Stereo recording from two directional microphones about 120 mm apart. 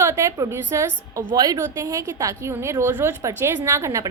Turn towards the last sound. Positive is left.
turn(degrees=-25)  # may be behind; listen again after turning